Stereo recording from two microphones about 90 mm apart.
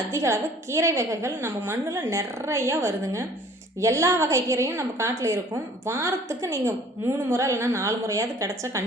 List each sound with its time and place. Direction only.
0.1 s a woman's voice: 30° right (ahead or behind)